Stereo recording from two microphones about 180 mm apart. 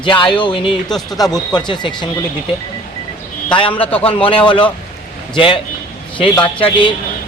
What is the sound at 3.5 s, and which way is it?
A man's voice, 30° left (ahead or behind).